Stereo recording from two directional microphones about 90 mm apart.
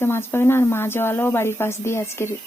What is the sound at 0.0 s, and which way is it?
Speech, 25° left (ahead or behind).